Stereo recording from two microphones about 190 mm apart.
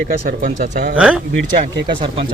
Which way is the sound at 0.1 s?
50° right (ahead or behind).